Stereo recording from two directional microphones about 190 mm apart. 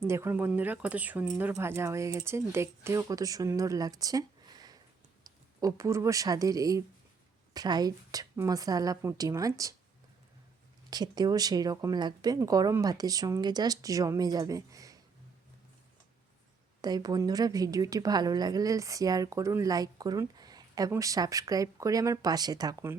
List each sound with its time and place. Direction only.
0.0 s a woman's voice: 15° right (ahead or behind)
10.8 s a woman's voice: 20° right (ahead or behind)
16.8 s a woman's voice: 20° right (ahead or behind)